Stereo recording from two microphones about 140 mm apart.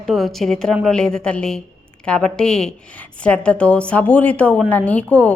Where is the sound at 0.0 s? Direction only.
Centre (ahead or behind).